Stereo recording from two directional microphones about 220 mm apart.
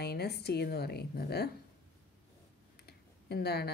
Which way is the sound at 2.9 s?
45° left (ahead or behind).